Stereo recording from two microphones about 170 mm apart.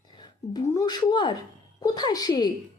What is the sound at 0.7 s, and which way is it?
A woman's voice, 20° left (ahead or behind).